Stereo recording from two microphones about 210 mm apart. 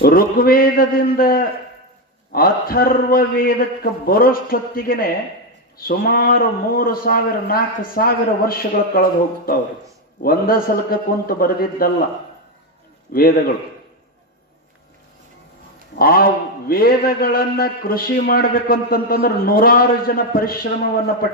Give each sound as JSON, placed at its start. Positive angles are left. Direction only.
{"t": 0.0, "sound": "a man's voice", "side_deg": 45}
{"t": 10.2, "sound": "a man's voice", "side_deg": 45}
{"t": 13.1, "sound": "a man's voice", "side_deg": 45}
{"t": 16.0, "sound": "a man's voice", "side_deg": 45}